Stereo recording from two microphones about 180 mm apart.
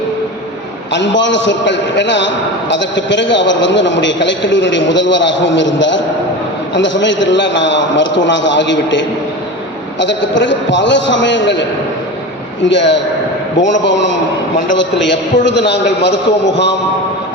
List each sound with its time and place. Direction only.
0.9 s a man's voice: 85° left
12.6 s a man's voice: 80° left